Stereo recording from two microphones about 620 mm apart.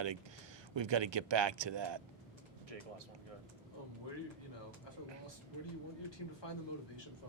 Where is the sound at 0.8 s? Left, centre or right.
Right.